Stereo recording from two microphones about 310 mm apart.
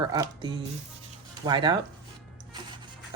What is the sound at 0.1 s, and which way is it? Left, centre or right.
Speech, centre.